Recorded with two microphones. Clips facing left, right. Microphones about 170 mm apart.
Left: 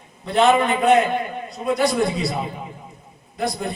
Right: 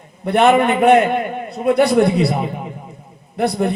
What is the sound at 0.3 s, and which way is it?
A man's voice, 60° right (ahead or behind).